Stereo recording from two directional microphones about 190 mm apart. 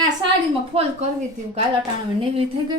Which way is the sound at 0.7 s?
30° right (ahead or behind).